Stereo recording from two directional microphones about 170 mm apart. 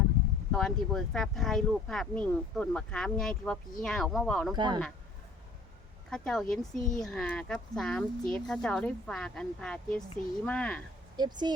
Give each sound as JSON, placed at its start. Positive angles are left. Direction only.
{"t": 0.5, "sound": "speech", "side_deg": 5}
{"t": 4.5, "sound": "speech", "side_deg": -25}
{"t": 6.1, "sound": "speech", "side_deg": 5}
{"t": 11.2, "sound": "speech", "side_deg": -25}